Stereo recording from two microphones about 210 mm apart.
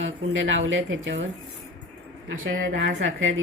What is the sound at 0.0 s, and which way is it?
A woman's voice, 65° right (ahead or behind).